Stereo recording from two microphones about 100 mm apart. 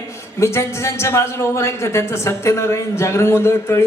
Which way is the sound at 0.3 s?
30° left (ahead or behind).